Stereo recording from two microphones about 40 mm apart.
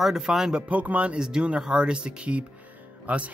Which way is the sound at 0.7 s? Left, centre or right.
Right.